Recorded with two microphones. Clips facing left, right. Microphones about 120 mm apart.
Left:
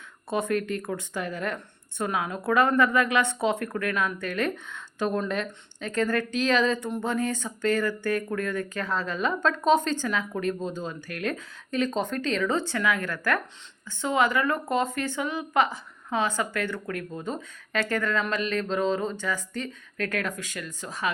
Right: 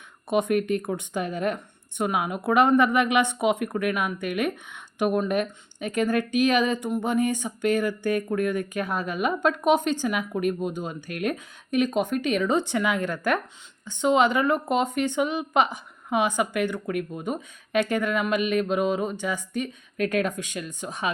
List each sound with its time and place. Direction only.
0.3 s speech: 20° right (ahead or behind)